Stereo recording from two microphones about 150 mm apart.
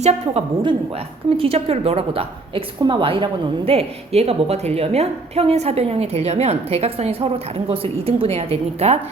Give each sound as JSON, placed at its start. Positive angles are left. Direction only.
{"t": 0.0, "sound": "a woman's voice", "side_deg": -45}